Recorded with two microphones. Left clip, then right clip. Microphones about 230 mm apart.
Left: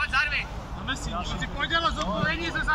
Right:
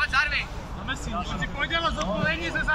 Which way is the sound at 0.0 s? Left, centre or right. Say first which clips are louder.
Right 1 dB; centre.